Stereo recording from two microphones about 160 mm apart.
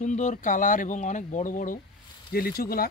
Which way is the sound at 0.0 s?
50° left (ahead or behind).